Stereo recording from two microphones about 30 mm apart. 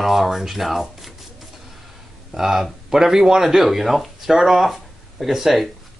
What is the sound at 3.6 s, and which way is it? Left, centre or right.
Speech, centre.